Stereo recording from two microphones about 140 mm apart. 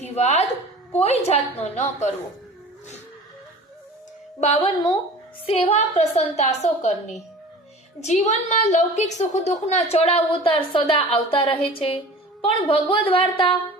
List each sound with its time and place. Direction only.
0.0 s a sound: 50° left (ahead or behind)
0.9 s a woman's voice: 50° left (ahead or behind)
4.4 s a woman's voice: 45° left (ahead or behind)